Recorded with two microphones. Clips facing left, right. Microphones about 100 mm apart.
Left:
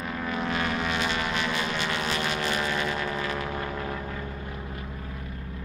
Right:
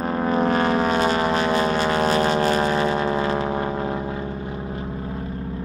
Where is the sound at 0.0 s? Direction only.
40° right (ahead or behind).